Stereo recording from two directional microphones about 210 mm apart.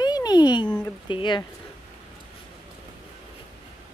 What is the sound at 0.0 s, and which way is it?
Dog, 20° left (ahead or behind).